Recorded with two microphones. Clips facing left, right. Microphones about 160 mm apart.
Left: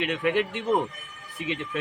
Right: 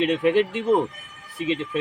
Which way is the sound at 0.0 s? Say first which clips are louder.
Right 6 dB; 30° right (ahead or behind).